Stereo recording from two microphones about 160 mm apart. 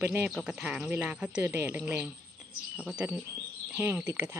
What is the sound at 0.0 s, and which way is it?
Speech, 15° right (ahead or behind).